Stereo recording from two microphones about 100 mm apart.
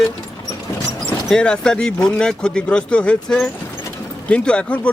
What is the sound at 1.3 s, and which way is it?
Speech, 10° left (ahead or behind).